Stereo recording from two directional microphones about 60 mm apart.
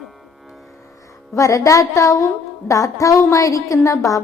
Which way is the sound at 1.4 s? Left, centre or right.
Left.